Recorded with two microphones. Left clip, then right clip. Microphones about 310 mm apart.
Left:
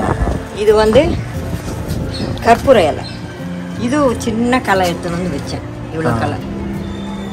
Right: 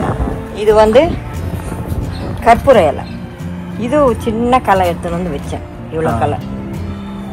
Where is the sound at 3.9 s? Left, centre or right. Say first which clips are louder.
Right 3 dB; centre.